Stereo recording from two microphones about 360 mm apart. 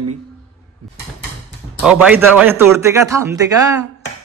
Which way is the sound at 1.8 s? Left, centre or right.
Centre.